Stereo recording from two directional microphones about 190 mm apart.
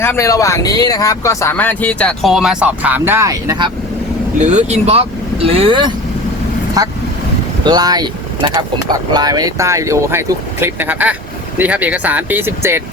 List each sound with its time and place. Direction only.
0.0 s speech: 15° left (ahead or behind); by 3.7 s 20° right (ahead or behind)
4.4 s speech: 40° right (ahead or behind); by 12.8 s 10° right (ahead or behind)